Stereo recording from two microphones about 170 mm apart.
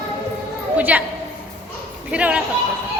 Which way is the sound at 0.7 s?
10° right (ahead or behind).